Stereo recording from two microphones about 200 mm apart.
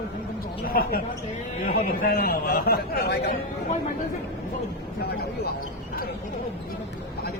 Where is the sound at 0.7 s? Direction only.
45° left (ahead or behind).